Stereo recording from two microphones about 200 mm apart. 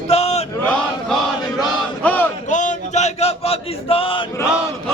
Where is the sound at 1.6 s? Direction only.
5° left (ahead or behind).